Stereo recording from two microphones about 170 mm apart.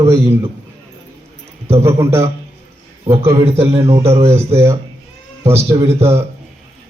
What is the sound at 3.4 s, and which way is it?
Speech, 35° right (ahead or behind).